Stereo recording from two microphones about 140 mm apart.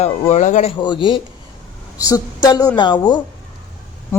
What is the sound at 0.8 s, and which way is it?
A man's voice, 35° left (ahead or behind).